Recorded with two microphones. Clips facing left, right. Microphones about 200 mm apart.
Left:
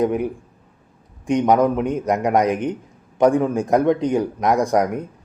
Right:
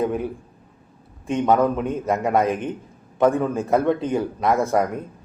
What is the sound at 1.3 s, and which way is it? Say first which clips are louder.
A man's voice: left 2 dB; 15° left (ahead or behind).